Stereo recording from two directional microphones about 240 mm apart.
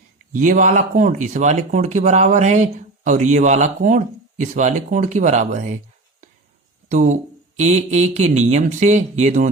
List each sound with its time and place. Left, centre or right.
0.3 s speech: right
6.8 s speech: right